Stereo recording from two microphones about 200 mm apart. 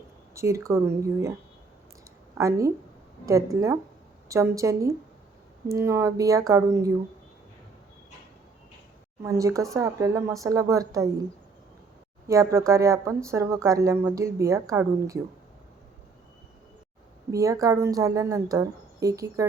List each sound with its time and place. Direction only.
0.3 s speech: 15° right (ahead or behind)
2.4 s speech: 15° right (ahead or behind)
9.2 s speech: 15° right (ahead or behind)
12.3 s speech: 15° right (ahead or behind)
17.3 s speech: 15° right (ahead or behind)